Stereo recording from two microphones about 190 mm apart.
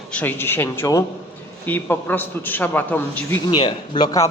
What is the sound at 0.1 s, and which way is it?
A man's voice, 10° left (ahead or behind).